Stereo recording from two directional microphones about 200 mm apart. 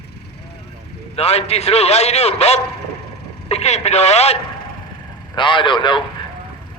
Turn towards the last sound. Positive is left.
turn(degrees=25)  # may be behind; listen again after turning